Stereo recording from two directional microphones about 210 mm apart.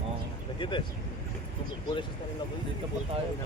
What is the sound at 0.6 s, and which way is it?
Speech, 25° left (ahead or behind).